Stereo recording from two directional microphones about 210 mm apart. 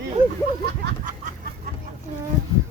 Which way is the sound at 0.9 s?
40° right (ahead or behind).